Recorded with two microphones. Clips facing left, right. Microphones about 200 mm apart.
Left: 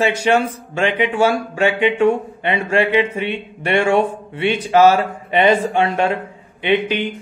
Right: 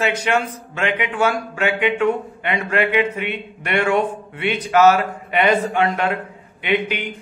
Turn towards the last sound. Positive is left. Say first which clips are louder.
# left 3 dB
turn(degrees=30)  # may be behind; listen again after turning